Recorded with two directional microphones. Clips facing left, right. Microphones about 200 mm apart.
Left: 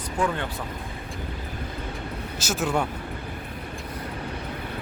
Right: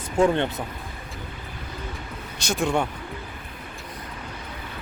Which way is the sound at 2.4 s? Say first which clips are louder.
Right 2 dB; 5° left (ahead or behind).